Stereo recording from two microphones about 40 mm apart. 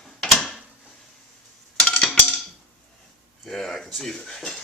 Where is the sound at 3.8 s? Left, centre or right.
Centre.